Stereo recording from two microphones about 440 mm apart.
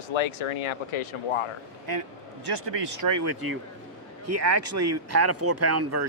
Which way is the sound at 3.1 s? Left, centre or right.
Right.